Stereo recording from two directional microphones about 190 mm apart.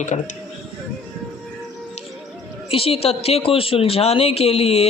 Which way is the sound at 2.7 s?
30° left (ahead or behind).